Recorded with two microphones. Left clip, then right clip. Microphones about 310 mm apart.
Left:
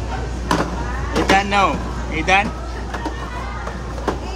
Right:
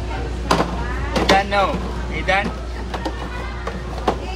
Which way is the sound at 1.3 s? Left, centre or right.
Centre.